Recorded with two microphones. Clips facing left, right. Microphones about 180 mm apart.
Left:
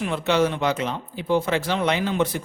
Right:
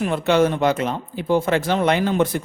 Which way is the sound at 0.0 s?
50° right (ahead or behind).